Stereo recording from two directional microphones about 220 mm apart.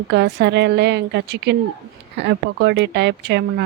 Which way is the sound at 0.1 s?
50° right (ahead or behind).